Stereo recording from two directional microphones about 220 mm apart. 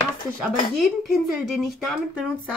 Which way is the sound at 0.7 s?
Centre (ahead or behind).